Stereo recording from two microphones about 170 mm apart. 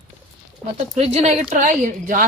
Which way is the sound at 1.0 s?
40° right (ahead or behind).